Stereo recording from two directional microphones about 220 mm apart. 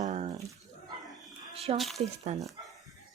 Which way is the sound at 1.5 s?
25° right (ahead or behind).